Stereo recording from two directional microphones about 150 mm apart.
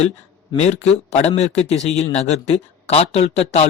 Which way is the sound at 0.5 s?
45° left (ahead or behind).